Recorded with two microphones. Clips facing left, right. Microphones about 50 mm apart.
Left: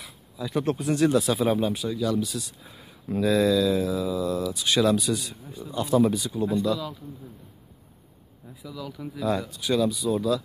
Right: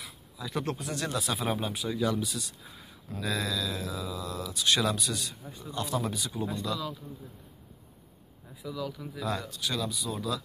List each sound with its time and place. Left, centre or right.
0.0 s a sound: centre
0.7 s speech: centre
8.6 s speech: centre